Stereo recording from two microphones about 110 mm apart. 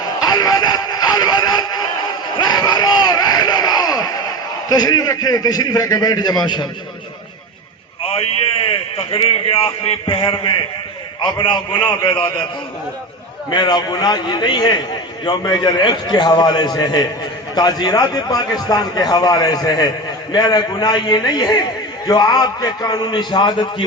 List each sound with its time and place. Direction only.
0.2 s music: 35° left (ahead or behind)
2.3 s crowd: 40° left (ahead or behind)
9.0 s a man's voice: 55° left (ahead or behind)
11.8 s a man's voice: 15° left (ahead or behind)
13.5 s a man's voice: 40° left (ahead or behind)